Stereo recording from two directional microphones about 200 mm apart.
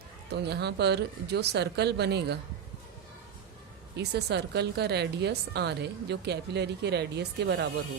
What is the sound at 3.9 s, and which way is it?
A woman's voice, 55° right (ahead or behind).